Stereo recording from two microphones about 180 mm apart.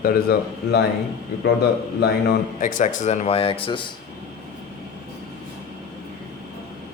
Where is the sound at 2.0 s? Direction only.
65° left (ahead or behind).